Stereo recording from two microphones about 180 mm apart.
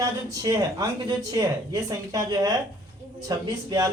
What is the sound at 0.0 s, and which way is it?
Speech, 20° right (ahead or behind).